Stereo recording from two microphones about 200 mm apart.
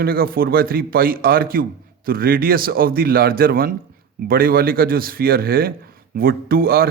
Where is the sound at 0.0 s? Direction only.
50° right (ahead or behind).